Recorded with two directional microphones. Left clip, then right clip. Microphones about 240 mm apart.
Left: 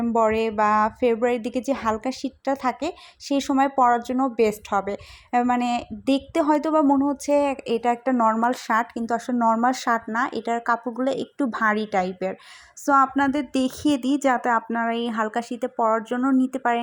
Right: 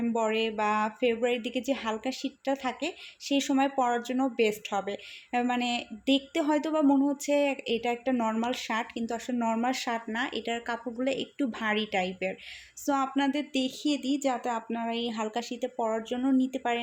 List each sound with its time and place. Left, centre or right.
0.1 s speech: left
9.4 s speech: centre
9.6 s speech: centre